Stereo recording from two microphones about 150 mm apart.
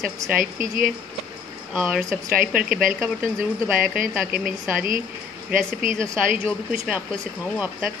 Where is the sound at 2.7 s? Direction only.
65° right (ahead or behind).